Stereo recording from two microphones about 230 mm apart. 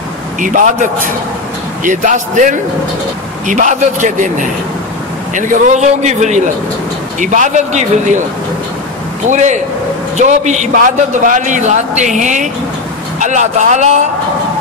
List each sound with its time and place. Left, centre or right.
0.4 s a man's voice: right
1.9 s a man's voice: right
9.3 s a man's voice: right